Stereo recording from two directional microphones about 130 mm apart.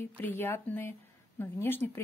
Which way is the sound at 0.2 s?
15° left (ahead or behind).